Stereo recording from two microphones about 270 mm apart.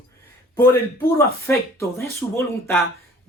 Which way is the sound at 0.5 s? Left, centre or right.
Centre.